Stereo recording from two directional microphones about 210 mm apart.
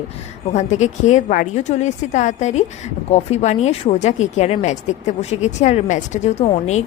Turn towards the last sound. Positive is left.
turn(degrees=30)  # may be behind; listen again after turning